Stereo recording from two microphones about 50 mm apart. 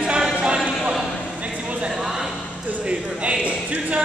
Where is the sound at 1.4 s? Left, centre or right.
Right; by 2.4 s centre.